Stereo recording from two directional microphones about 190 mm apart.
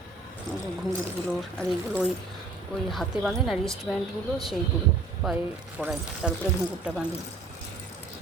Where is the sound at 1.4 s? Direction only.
5° left (ahead or behind).